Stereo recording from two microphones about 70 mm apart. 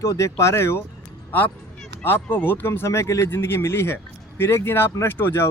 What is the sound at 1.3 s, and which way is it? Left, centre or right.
Speech, left.